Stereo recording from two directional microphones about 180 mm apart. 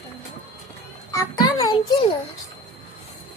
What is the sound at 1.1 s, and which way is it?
A child's voice, 20° left (ahead or behind).